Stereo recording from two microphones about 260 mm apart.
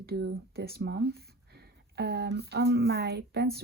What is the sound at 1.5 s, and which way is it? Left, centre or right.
Speech, right.